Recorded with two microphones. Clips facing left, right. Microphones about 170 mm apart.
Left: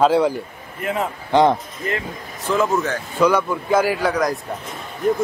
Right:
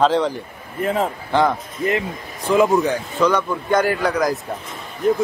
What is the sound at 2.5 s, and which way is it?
Speech, 15° right (ahead or behind).